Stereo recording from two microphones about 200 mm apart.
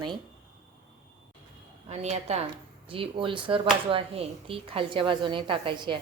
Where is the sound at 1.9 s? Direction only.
35° right (ahead or behind).